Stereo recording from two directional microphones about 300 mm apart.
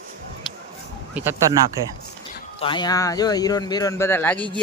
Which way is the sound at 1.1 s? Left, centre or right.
Centre.